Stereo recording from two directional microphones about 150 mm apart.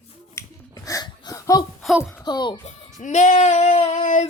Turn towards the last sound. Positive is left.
turn(degrees=50)  # may be behind; listen again after turning